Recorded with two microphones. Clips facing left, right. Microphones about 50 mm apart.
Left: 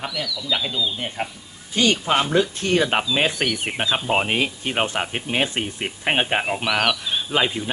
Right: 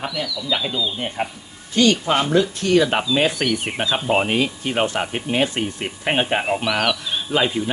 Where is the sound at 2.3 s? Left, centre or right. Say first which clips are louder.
Right 3 dB; left.